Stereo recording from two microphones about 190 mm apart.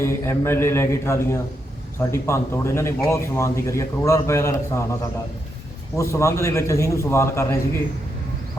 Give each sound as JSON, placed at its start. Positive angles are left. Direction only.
{"t": 0.0, "sound": "a man's voice", "side_deg": 15}
{"t": 6.0, "sound": "a man's voice", "side_deg": 15}